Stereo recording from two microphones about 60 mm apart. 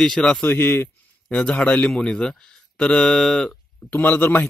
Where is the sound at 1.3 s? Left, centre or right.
Centre.